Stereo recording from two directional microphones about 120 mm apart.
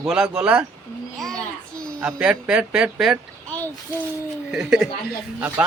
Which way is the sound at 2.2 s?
10° right (ahead or behind).